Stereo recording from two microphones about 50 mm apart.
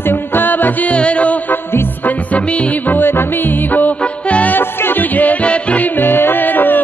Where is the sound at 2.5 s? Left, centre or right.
Left.